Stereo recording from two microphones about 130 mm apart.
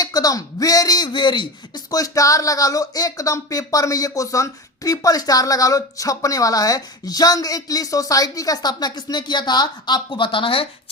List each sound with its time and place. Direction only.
0.0 s speech: 30° left (ahead or behind)